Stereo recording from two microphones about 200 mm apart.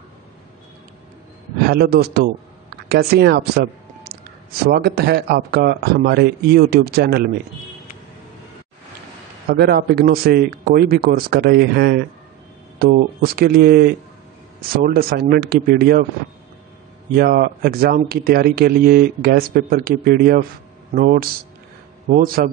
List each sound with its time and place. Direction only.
1.7 s speech: 50° right (ahead or behind)
9.6 s speech: 50° right (ahead or behind)
17.1 s speech: 50° right (ahead or behind)